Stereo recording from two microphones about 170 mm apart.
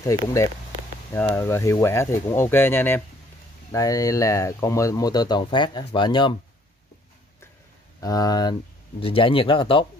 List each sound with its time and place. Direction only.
1.1 s speech: 15° left (ahead or behind)
8.0 s speech: 20° left (ahead or behind)